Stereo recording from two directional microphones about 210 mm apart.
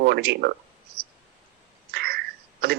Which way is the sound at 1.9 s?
50° right (ahead or behind).